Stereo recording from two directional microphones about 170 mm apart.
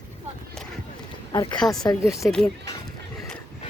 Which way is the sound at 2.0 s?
Centre (ahead or behind).